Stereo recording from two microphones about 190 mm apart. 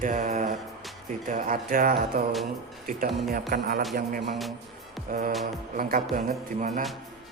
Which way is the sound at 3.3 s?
50° right (ahead or behind).